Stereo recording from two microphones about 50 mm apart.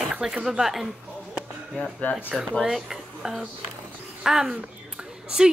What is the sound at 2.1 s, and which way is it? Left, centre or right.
Speech, left.